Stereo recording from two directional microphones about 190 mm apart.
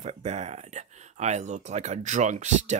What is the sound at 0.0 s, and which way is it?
Speech, 35° right (ahead or behind).